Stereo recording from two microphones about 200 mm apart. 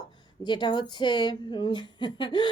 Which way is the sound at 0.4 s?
25° left (ahead or behind).